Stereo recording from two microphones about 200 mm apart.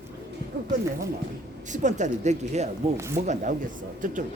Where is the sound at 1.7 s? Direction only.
35° right (ahead or behind).